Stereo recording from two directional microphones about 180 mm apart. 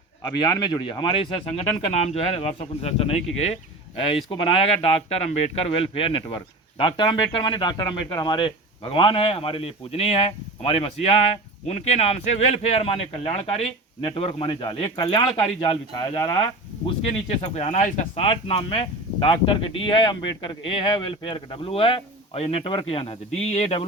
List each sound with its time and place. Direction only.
0.2 s speech: 25° left (ahead or behind)
17.1 s speech: 40° left (ahead or behind)
18.3 s speech: 30° left (ahead or behind)